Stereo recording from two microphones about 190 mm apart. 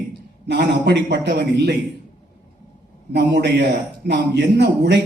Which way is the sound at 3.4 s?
60° right (ahead or behind).